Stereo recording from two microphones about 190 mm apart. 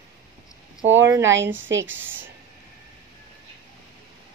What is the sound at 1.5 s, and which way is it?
Speech, 80° right.